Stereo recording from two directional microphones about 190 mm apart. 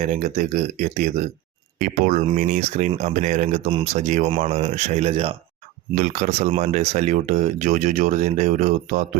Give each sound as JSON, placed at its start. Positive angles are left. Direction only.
{"t": 0.0, "sound": "speech", "side_deg": -40}